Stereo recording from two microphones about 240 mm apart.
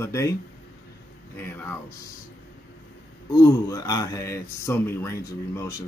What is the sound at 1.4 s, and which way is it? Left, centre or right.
Speech, centre.